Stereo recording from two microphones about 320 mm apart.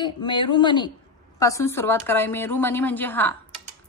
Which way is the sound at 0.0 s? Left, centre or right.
Centre.